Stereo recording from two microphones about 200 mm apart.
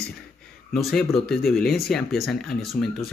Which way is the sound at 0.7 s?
Centre (ahead or behind).